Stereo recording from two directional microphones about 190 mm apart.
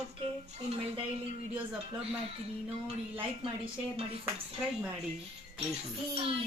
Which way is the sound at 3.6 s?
30° right (ahead or behind).